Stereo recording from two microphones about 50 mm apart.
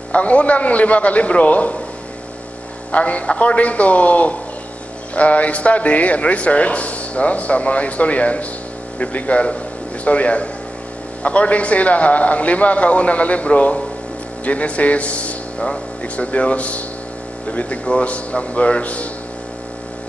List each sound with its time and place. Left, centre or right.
0.1 s speech: left
2.9 s speech: left